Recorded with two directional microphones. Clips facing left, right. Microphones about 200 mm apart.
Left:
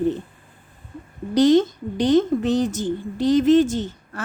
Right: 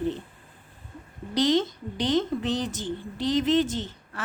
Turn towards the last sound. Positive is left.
turn(degrees=45)  # may be behind; listen again after turning